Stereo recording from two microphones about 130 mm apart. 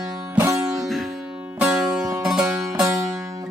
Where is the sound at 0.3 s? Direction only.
20° right (ahead or behind).